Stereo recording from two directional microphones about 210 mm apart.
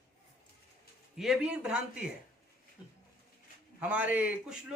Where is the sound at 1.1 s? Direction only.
Centre (ahead or behind).